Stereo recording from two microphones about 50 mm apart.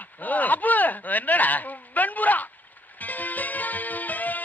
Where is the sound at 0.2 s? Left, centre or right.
Left.